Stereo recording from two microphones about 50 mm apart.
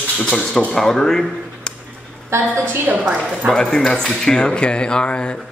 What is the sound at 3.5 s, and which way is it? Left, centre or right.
Speech, centre.